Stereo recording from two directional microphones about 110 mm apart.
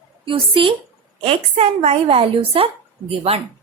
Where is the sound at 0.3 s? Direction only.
55° right (ahead or behind).